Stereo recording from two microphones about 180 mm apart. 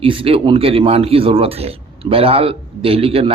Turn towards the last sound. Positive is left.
turn(degrees=-30)  # may be behind; listen again after turning